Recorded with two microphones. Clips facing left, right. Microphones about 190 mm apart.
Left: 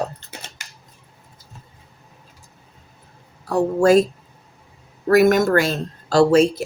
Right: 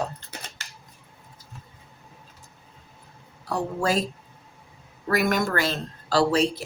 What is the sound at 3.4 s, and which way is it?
Speech, 50° left (ahead or behind).